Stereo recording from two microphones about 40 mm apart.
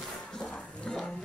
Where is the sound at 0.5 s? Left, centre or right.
Left.